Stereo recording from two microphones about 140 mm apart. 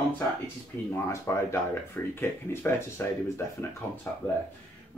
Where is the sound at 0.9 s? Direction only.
20° left (ahead or behind).